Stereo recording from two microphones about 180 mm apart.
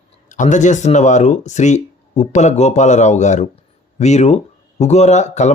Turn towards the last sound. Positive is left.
turn(degrees=40)  # may be behind; listen again after turning